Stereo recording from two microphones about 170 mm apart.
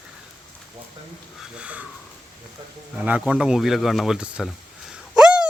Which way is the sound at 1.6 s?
10° right (ahead or behind).